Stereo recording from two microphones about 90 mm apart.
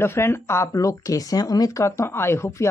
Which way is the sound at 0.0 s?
25° left (ahead or behind).